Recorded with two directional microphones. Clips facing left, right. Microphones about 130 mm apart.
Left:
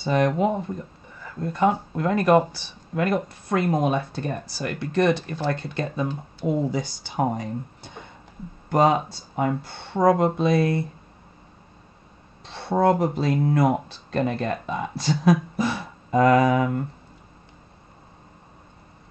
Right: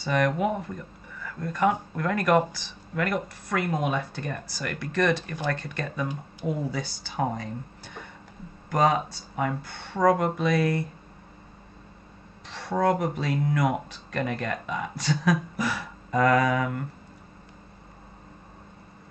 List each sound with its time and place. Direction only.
0.0 s speech: 25° left (ahead or behind)
12.4 s speech: 25° left (ahead or behind)